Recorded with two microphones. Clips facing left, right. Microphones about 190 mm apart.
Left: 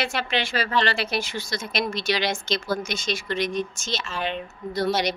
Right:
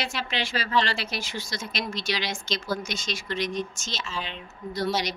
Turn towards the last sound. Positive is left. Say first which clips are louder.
# left 4 dB
turn(degrees=60)  # may be behind; listen again after turning